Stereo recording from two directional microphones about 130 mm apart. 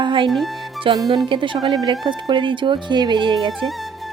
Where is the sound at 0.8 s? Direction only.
30° right (ahead or behind).